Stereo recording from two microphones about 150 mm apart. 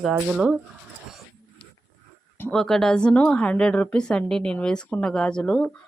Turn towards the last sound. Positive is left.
turn(degrees=5)  # may be behind; listen again after turning